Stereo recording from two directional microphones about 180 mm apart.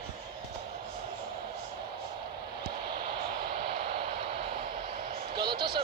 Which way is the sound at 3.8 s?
60° right (ahead or behind).